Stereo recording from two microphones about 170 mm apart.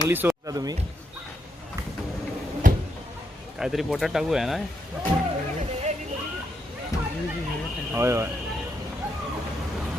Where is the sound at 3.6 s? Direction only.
Centre (ahead or behind).